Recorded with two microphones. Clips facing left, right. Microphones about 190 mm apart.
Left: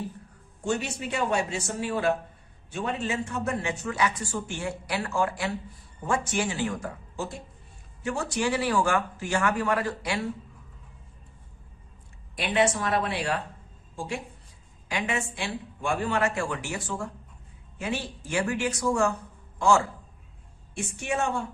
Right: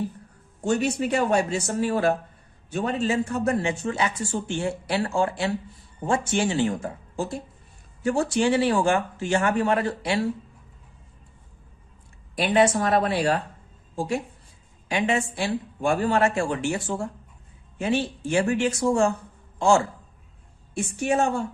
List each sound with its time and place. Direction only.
0.6 s speech: 40° right (ahead or behind); by 10.2 s 25° right (ahead or behind)
12.4 s a woman's voice: 40° right (ahead or behind)
14.8 s a man's voice: 25° right (ahead or behind)
21.0 s a woman's voice: 35° right (ahead or behind)